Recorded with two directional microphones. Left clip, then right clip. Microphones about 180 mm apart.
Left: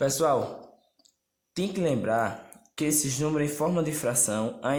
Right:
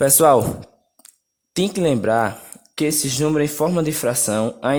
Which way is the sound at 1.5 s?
45° right (ahead or behind).